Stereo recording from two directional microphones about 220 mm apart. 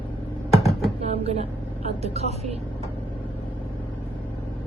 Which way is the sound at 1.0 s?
30° right (ahead or behind).